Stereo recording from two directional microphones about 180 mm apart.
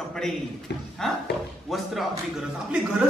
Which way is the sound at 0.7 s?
70° left (ahead or behind).